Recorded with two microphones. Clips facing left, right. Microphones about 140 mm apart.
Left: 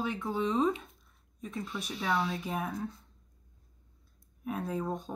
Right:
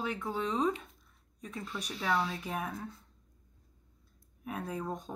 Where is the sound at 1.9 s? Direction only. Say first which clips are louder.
Left 1 dB; 20° left (ahead or behind).